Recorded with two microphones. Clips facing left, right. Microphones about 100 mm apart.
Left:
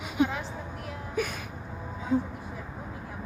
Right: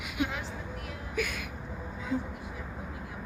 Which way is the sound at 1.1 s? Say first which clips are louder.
Left 2 dB; 35° left (ahead or behind).